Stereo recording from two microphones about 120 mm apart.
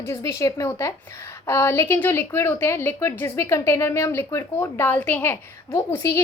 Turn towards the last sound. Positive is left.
turn(degrees=20)  # may be behind; listen again after turning